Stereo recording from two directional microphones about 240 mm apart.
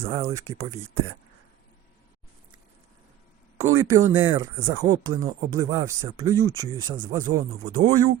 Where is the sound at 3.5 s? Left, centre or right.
Right.